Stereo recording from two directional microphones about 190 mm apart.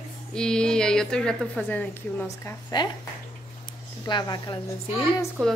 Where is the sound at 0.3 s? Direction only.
5° left (ahead or behind); by 2.9 s 20° left (ahead or behind).